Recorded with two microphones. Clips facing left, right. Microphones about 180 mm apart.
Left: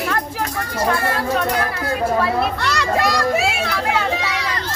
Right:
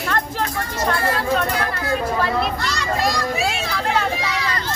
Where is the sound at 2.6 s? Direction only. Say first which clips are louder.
Left 4 dB; 65° left (ahead or behind).